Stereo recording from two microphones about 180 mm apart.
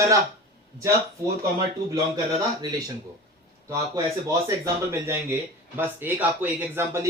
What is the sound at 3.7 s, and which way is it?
Speech, 20° right (ahead or behind).